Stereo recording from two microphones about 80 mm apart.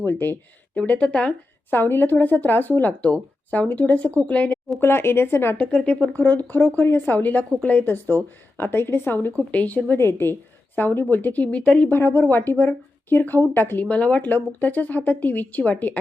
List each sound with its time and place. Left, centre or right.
0.0 s speech: left
1.7 s a woman's voice: left
4.8 s speech: left
5.5 s speech: centre